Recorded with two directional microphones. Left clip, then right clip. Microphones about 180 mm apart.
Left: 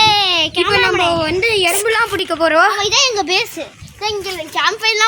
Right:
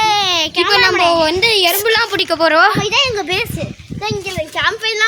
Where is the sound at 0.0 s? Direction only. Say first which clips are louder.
Left 1 dB; centre (ahead or behind).